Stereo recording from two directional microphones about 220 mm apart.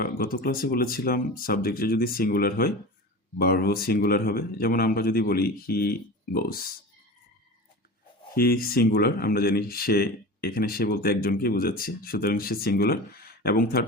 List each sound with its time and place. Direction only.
0.0 s speech: 40° left (ahead or behind)
8.3 s speech: 40° left (ahead or behind)